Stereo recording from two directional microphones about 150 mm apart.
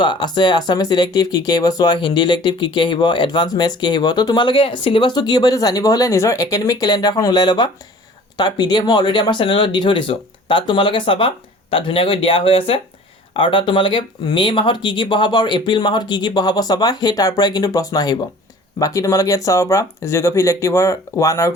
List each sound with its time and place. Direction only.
0.0 s speech: 30° left (ahead or behind)